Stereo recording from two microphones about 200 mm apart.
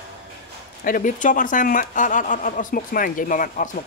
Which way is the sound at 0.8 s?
45° left (ahead or behind).